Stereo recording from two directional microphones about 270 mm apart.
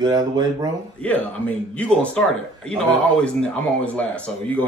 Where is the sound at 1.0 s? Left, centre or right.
Centre.